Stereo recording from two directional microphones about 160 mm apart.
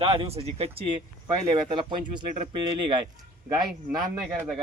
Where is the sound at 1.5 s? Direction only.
30° right (ahead or behind).